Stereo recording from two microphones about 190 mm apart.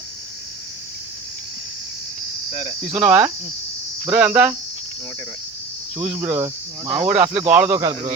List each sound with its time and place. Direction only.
2.5 s cricket: 35° left (ahead or behind)
2.9 s cricket: 10° right (ahead or behind)
6.0 s cricket: 5° right (ahead or behind)
7.0 s speech: 5° right (ahead or behind)
7.5 s cricket: 10° right (ahead or behind)